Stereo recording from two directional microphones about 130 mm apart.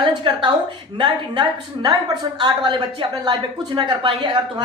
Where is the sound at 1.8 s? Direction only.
35° right (ahead or behind).